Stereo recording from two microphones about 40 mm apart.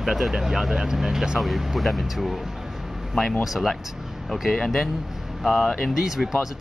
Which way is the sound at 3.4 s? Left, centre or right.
Centre.